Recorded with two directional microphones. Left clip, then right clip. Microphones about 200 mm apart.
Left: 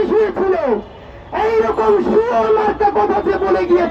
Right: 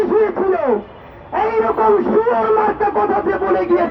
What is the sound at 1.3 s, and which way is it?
A man's voice, 35° right (ahead or behind).